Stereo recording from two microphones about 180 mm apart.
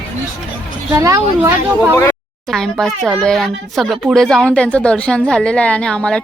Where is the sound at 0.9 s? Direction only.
15° right (ahead or behind).